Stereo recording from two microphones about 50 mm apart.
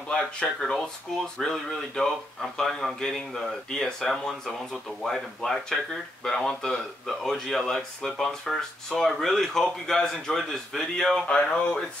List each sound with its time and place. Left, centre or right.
0.6 s speech: centre
11.2 s speech: left